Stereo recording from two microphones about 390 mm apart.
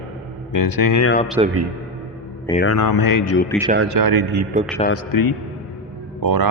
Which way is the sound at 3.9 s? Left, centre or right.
Right.